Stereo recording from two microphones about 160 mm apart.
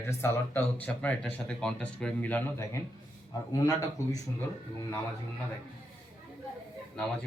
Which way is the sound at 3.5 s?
20° left (ahead or behind).